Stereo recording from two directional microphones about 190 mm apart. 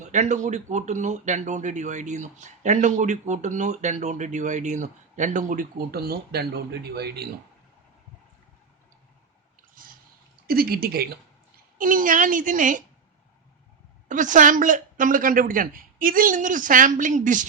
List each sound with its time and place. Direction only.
0.0 s speech: 40° right (ahead or behind); by 7.3 s 55° right (ahead or behind)
10.4 s a woman's voice: 50° right (ahead or behind)
14.1 s a woman's voice: 40° right (ahead or behind)